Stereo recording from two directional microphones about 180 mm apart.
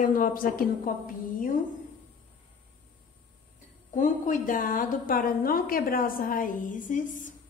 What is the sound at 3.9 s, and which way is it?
A woman's voice, 45° left (ahead or behind).